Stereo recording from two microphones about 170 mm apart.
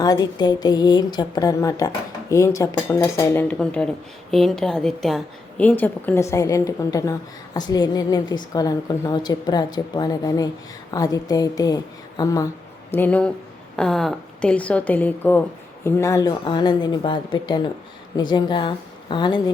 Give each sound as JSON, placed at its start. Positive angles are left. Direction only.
{"t": 0.0, "sound": "a woman's voice", "side_deg": 25}
{"t": 12.9, "sound": "a woman's voice", "side_deg": 10}